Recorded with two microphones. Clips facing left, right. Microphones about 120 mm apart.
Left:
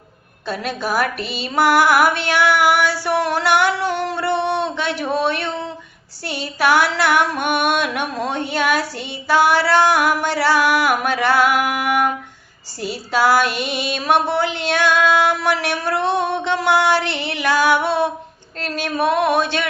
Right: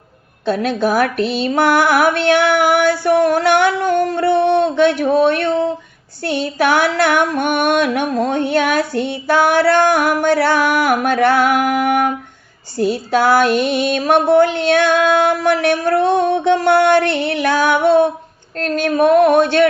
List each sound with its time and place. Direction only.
0.5 s female singing: 50° right (ahead or behind)